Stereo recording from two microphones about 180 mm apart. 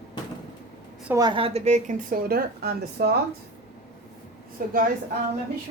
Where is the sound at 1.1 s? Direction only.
20° right (ahead or behind); by 3.1 s 60° right (ahead or behind).